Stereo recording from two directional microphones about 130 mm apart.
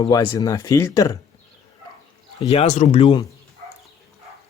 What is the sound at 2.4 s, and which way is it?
Speech, 55° left (ahead or behind).